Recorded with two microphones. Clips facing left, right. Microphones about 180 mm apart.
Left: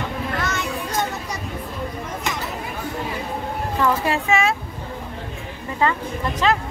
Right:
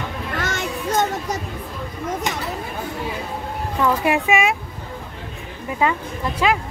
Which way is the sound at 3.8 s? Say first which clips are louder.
Right 2 dB; 15° right (ahead or behind).